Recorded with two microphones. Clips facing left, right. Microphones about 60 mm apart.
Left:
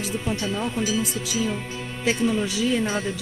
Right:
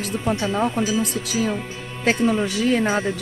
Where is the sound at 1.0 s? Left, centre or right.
Right.